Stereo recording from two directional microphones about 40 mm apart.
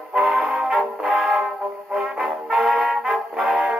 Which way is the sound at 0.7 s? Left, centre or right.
Centre.